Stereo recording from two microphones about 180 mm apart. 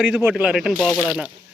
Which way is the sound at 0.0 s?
5° right (ahead or behind).